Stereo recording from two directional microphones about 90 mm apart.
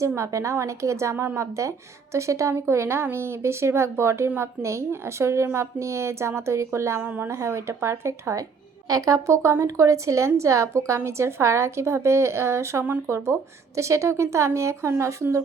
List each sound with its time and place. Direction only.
0.2 s a woman's voice: 35° right (ahead or behind)